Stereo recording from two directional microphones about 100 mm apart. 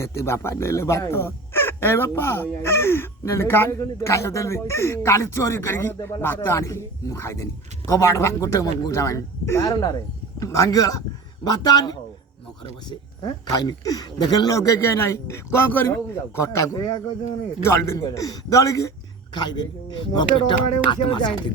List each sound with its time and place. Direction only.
0.0 s speech: 25° left (ahead or behind)
19.3 s speech: 45° left (ahead or behind)